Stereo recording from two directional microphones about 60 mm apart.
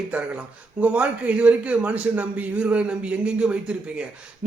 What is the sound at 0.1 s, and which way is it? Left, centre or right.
Speech, centre.